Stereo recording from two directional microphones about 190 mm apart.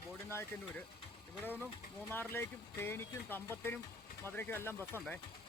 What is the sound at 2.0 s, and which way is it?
Speech, 10° left (ahead or behind).